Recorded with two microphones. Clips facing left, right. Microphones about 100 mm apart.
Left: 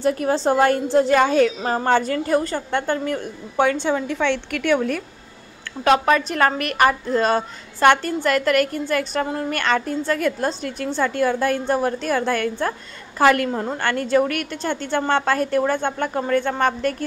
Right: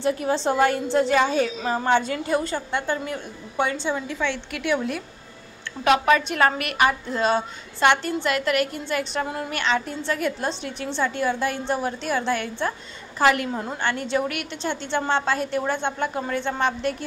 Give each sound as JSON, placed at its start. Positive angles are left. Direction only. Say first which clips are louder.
{"t": 0.0, "sound": "a woman's voice", "louder": "left 3 dB", "side_deg": 45}
{"t": 4.1, "sound": "a woman's voice", "louder": "left 5 dB", "side_deg": -5}
{"t": 4.5, "sound": "a woman's voice", "louder": "left 5 dB", "side_deg": 55}